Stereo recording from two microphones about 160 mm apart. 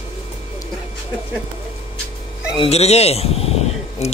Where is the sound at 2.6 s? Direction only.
40° left (ahead or behind).